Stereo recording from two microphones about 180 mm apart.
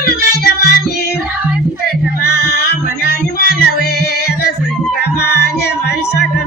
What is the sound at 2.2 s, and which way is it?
Music, 65° left (ahead or behind).